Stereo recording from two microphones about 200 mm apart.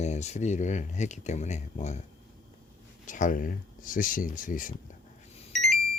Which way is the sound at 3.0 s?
40° left (ahead or behind).